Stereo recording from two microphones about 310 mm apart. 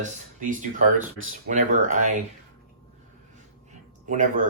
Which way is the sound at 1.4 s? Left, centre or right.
Right.